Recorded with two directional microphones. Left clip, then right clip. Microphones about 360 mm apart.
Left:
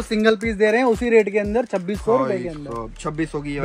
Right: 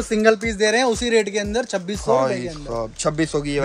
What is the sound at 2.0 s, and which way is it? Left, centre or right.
Speech, centre.